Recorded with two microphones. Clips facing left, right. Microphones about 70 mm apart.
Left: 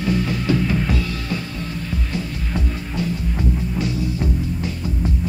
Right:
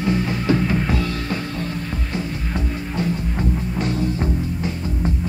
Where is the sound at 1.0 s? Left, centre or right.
Right.